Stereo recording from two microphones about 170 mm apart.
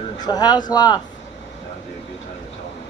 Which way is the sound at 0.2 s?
25° left (ahead or behind).